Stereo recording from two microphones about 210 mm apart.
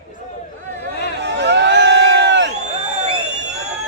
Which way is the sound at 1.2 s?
55° right (ahead or behind).